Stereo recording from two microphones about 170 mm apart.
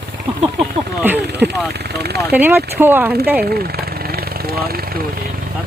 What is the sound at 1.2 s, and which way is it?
Speech, 75° right (ahead or behind).